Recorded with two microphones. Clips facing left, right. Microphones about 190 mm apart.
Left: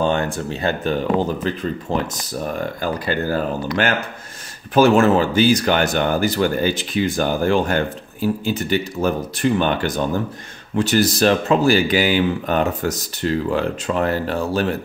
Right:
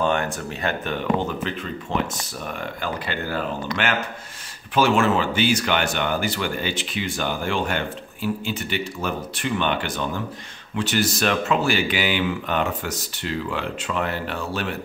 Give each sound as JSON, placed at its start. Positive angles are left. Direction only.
{"t": 0.0, "sound": "speech", "side_deg": 30}